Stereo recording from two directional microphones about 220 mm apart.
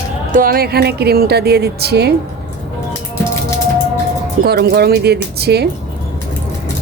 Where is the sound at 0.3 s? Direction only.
40° right (ahead or behind).